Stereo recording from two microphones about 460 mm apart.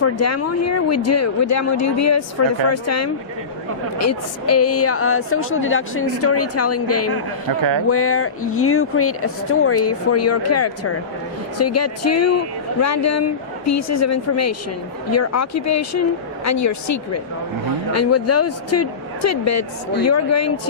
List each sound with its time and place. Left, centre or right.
0.0 s a woman's voice: left